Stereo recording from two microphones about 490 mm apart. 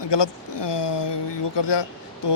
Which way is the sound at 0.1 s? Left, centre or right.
Left.